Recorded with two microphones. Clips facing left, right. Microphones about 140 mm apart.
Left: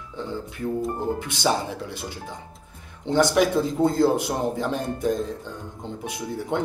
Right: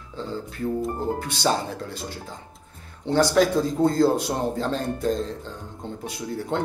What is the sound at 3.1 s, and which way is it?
Speech, 20° left (ahead or behind).